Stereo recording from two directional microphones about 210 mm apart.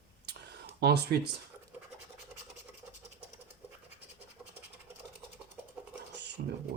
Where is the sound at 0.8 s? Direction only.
50° right (ahead or behind).